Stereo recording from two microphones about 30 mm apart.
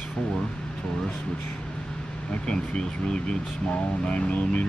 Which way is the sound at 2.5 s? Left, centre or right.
Left.